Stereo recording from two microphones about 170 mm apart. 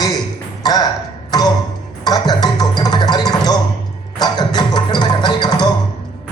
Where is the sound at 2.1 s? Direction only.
25° left (ahead or behind).